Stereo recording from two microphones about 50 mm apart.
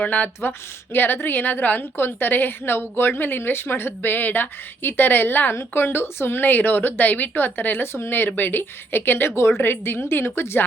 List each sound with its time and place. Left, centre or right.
0.0 s a woman's voice: left
1.8 s a woman's voice: left